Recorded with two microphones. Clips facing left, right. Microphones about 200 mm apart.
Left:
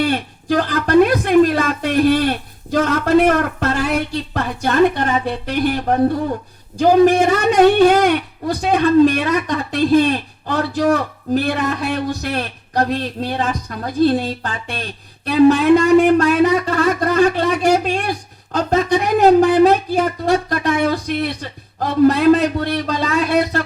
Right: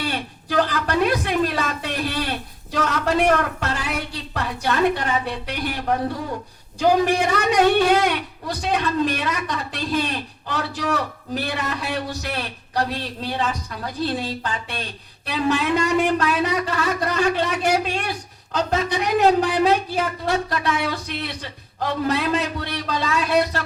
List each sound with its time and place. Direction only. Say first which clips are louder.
0.0 s a woman's voice: left 8 dB; 50° left (ahead or behind)